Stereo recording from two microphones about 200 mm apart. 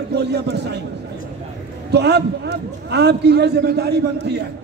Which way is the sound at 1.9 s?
55° right (ahead or behind).